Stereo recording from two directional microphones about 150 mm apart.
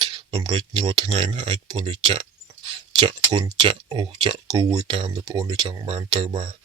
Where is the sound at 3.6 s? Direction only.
35° right (ahead or behind).